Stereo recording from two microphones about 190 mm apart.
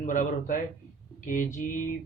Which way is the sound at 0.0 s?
45° left (ahead or behind).